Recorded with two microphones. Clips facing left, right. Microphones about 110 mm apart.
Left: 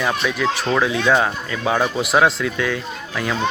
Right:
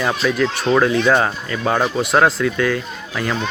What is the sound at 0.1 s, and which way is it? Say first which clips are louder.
Speech: right 2 dB; centre (ahead or behind).